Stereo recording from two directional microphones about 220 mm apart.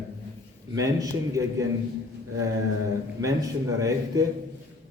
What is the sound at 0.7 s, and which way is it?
Speech, 15° right (ahead or behind).